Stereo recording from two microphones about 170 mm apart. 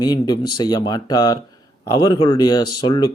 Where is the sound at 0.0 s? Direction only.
25° left (ahead or behind).